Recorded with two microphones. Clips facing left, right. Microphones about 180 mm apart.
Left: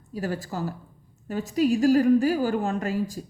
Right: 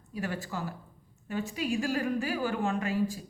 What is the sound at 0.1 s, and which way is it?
A woman's voice, 40° left (ahead or behind).